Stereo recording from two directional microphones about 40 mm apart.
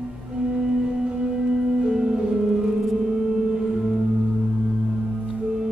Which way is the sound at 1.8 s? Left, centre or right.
Centre.